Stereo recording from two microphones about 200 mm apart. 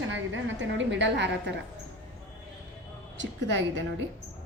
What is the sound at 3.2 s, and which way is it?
Speech, 65° right (ahead or behind).